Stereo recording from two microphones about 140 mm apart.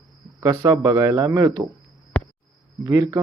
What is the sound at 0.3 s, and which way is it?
Speech, 30° right (ahead or behind).